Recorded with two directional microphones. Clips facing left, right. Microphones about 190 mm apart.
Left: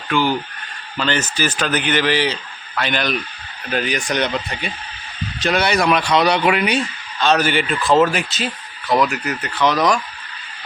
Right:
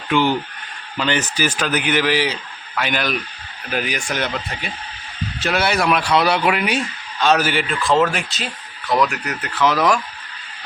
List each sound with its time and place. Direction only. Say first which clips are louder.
0.1 s speech: right 1 dB; 20° right (ahead or behind); by 10.0 s 5° right (ahead or behind)